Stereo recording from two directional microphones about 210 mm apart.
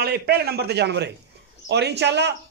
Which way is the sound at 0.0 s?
50° right (ahead or behind).